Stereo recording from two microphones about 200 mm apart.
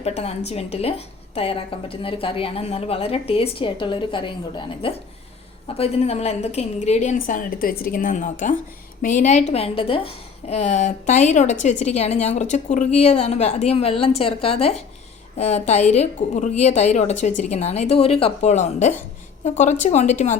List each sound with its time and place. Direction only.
0.0 s a woman's voice: 30° left (ahead or behind)